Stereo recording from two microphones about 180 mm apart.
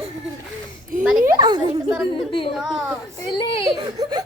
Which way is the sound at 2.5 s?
5° right (ahead or behind).